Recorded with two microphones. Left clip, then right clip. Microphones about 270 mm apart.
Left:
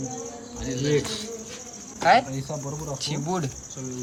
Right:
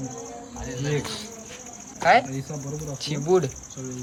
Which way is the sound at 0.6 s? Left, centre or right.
Centre.